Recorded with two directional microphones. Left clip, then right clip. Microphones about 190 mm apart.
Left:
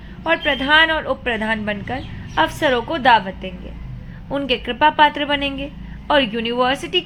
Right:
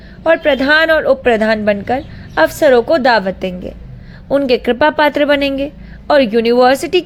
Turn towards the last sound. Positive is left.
turn(degrees=-35)  # may be behind; listen again after turning